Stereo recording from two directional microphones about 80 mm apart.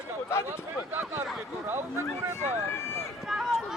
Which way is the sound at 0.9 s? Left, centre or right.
Right.